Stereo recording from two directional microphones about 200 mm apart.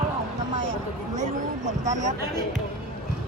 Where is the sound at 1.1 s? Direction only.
35° right (ahead or behind).